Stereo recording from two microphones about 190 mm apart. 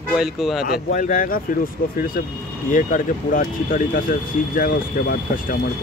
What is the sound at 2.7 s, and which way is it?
Speech, 45° left (ahead or behind).